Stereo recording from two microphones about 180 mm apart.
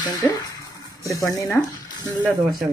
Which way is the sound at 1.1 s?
20° left (ahead or behind).